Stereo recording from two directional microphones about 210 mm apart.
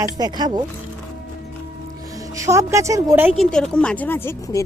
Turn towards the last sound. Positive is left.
turn(degrees=15)  # may be behind; listen again after turning